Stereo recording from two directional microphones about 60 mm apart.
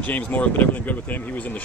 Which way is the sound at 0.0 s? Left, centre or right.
Left.